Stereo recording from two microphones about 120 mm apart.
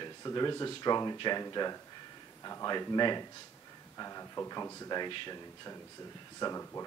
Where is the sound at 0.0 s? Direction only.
35° left (ahead or behind).